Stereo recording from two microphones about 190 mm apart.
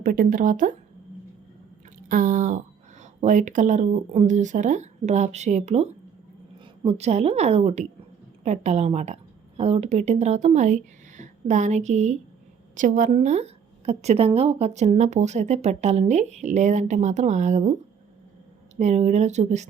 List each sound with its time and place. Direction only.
0.0 s a woman's voice: 45° right (ahead or behind)
2.0 s a woman's voice: 45° right (ahead or behind)
18.8 s a woman's voice: 35° right (ahead or behind)